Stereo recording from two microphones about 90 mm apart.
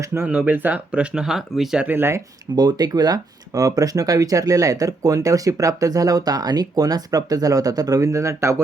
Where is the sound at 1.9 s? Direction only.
25° right (ahead or behind).